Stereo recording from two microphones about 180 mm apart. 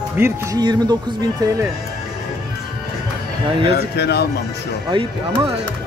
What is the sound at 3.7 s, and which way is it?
Speech, 65° left (ahead or behind).